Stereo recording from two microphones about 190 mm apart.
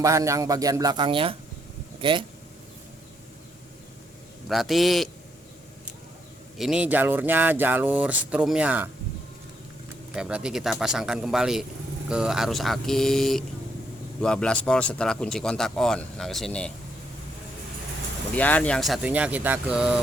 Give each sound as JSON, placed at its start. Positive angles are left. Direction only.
{"t": 0.0, "sound": "speech", "side_deg": -15}
{"t": 4.4, "sound": "speech", "side_deg": 0}
{"t": 6.6, "sound": "speech", "side_deg": -5}
{"t": 10.2, "sound": "speech", "side_deg": -5}
{"t": 18.3, "sound": "speech", "side_deg": 10}